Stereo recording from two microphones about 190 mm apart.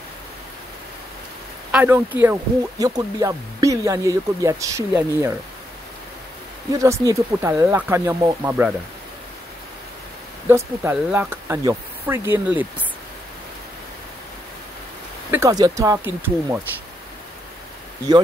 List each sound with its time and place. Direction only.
1.7 s speech: 10° right (ahead or behind)
6.7 s speech: 15° right (ahead or behind)
10.5 s speech: 10° right (ahead or behind)
15.3 s speech: 15° right (ahead or behind)